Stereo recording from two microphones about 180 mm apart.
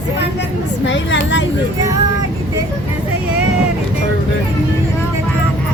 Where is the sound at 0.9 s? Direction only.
85° left.